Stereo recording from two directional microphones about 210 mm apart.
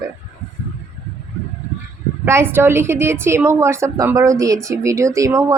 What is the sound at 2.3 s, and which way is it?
A woman's voice, 10° right (ahead or behind).